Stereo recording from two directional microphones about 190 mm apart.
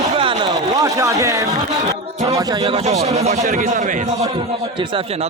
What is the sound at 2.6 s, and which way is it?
A man's voice, 35° right (ahead or behind).